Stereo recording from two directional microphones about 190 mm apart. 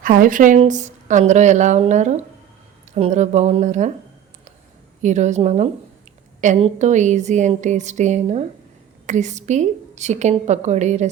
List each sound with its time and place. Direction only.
0.0 s a woman's voice: 45° right (ahead or behind)
5.0 s a woman's voice: 40° right (ahead or behind)